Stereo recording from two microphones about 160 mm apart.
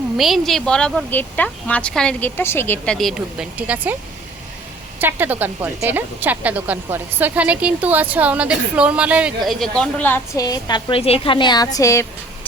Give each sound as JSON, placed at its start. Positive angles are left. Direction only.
{"t": 0.2, "sound": "speech", "side_deg": 0}
{"t": 4.9, "sound": "speech", "side_deg": -10}
{"t": 10.3, "sound": "a woman's voice", "side_deg": 25}